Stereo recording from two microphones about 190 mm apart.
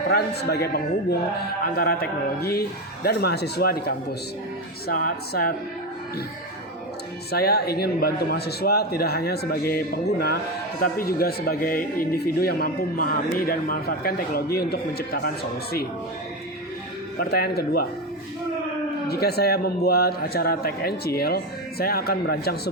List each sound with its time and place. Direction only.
0.1 s a man's voice: 55° left (ahead or behind)
7.3 s a man's voice: 55° left (ahead or behind)
17.2 s a man's voice: 55° left (ahead or behind)
19.0 s a man's voice: 55° left (ahead or behind)